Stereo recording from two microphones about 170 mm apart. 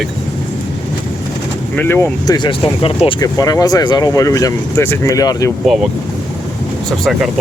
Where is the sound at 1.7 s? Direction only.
10° left (ahead or behind).